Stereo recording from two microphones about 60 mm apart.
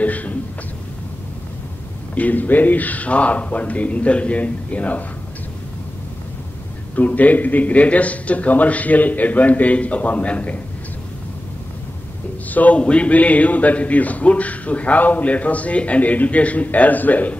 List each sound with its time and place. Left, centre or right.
0.0 s speech: left
2.1 s speech: left
7.0 s speech: left
12.4 s speech: left